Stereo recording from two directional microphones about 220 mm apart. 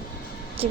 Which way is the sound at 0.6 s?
25° right (ahead or behind).